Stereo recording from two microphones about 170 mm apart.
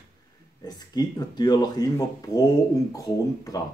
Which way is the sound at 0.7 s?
25° left (ahead or behind).